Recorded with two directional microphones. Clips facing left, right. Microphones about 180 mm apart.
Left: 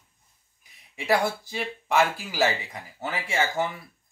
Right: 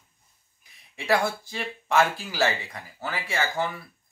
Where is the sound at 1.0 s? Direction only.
10° left (ahead or behind).